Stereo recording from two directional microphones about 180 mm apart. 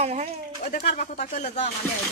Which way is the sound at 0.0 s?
40° right (ahead or behind).